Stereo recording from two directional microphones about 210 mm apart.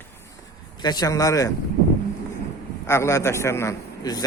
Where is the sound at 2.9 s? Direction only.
15° left (ahead or behind).